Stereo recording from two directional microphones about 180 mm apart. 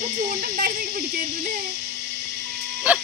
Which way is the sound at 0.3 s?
55° right (ahead or behind).